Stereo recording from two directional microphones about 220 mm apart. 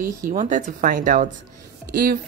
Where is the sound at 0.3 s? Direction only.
35° right (ahead or behind).